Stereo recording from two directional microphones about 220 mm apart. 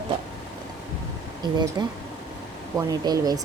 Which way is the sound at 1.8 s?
20° right (ahead or behind).